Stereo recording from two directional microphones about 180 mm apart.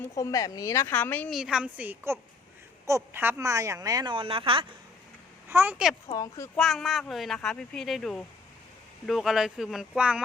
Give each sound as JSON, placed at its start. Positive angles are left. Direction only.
{"t": 0.2, "sound": "speech", "side_deg": 20}
{"t": 1.4, "sound": "a woman's voice", "side_deg": -5}
{"t": 5.5, "sound": "a woman's voice", "side_deg": -10}
{"t": 6.1, "sound": "speech", "side_deg": 20}
{"t": 6.6, "sound": "speech", "side_deg": 0}